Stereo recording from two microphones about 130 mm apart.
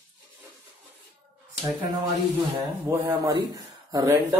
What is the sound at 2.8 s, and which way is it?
Speech, 30° right (ahead or behind).